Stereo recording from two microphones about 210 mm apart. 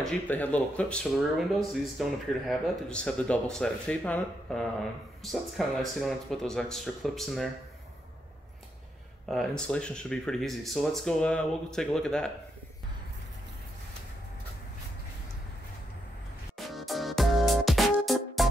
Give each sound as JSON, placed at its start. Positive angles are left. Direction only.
{"t": 0.0, "sound": "speech", "side_deg": 5}
{"t": 9.3, "sound": "speech", "side_deg": 0}
{"t": 16.5, "sound": "music", "side_deg": 0}